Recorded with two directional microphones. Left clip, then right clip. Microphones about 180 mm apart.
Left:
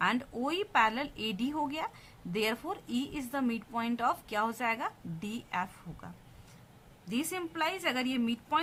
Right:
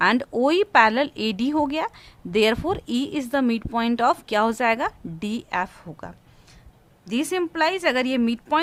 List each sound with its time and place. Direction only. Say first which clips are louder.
0.0 s speech: right 12 dB; 50° right (ahead or behind)